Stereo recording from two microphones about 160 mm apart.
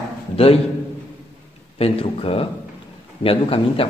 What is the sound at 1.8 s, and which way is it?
A man's voice, 35° left (ahead or behind).